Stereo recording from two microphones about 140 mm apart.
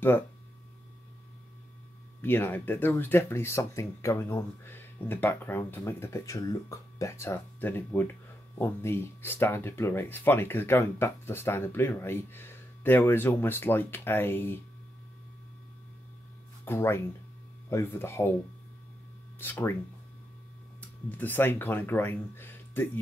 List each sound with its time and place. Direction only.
2.2 s speech: 15° left (ahead or behind)
16.6 s speech: 15° left (ahead or behind)
19.4 s speech: 15° left (ahead or behind)
21.1 s speech: 15° left (ahead or behind)